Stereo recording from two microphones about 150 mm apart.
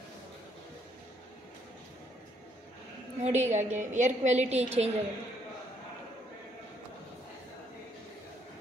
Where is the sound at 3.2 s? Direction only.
50° right (ahead or behind).